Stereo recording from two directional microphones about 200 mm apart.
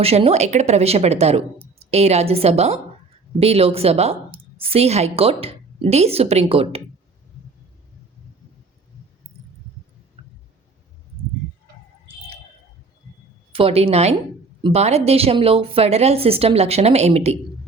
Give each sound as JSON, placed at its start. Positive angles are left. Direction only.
{"t": 0.0, "sound": "a woman's voice", "side_deg": -30}
{"t": 10.2, "sound": "a sound", "side_deg": -25}
{"t": 13.5, "sound": "a woman's voice", "side_deg": -25}